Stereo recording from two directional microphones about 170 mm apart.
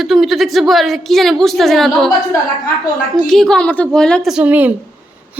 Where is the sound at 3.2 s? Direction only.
Centre (ahead or behind).